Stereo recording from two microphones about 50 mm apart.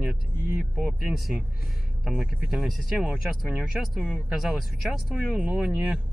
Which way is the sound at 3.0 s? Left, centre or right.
Centre.